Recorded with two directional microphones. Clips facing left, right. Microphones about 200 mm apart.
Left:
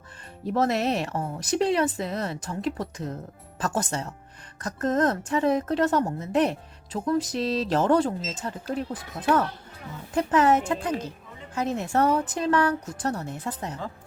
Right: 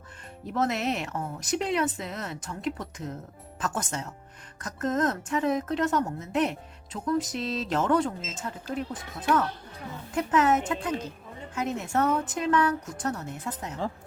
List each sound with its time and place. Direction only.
0.5 s a woman's voice: 35° left (ahead or behind)